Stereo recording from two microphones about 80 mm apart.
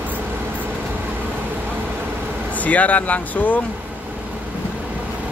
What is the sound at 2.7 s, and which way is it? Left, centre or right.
Speech, centre.